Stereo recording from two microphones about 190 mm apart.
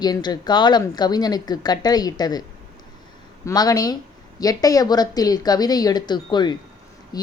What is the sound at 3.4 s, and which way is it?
Speech, 20° left (ahead or behind).